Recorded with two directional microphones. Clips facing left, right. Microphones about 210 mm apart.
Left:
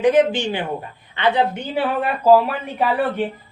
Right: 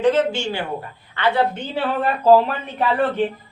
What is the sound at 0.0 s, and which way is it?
A woman's voice, 15° left (ahead or behind).